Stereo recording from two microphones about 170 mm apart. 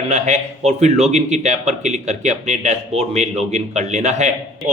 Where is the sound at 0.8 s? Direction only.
40° right (ahead or behind).